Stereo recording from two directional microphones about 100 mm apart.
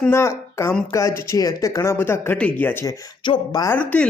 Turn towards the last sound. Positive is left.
turn(degrees=15)  # may be behind; listen again after turning